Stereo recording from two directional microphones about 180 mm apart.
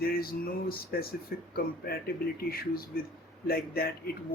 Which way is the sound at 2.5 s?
55° left (ahead or behind).